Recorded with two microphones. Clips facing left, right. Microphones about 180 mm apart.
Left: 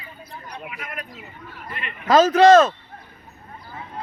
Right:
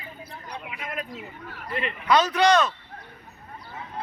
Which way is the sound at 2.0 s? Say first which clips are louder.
Left 7 dB; 40° left (ahead or behind).